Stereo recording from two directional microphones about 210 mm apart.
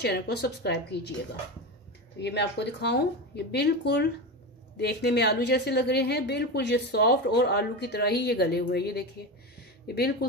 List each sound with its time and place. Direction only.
0.0 s a woman's voice: 50° left (ahead or behind)
2.2 s a woman's voice: 55° left (ahead or behind)
9.6 s a sound: 50° left (ahead or behind)